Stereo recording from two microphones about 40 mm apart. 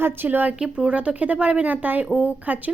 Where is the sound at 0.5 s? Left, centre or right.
Centre.